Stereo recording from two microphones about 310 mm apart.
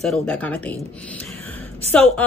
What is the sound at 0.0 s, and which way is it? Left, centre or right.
A woman's voice, centre.